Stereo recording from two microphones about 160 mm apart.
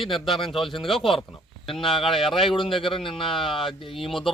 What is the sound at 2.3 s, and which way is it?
Speech, 35° left (ahead or behind).